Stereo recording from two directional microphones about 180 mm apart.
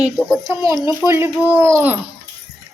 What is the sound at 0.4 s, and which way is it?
A child's voice, 20° right (ahead or behind).